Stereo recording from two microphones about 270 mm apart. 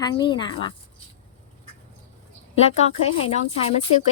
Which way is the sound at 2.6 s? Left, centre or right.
Left.